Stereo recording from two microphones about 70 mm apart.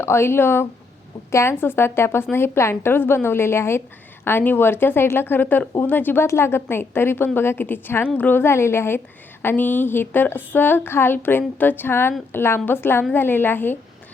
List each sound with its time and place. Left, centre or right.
0.0 s a woman's voice: left